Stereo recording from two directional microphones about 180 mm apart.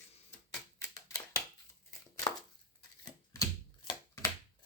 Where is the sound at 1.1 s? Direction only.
20° left (ahead or behind).